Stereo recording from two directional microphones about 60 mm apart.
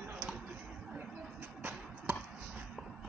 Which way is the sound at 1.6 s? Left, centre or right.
Right.